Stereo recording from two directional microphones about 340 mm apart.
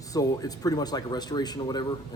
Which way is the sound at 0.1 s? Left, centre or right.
Centre.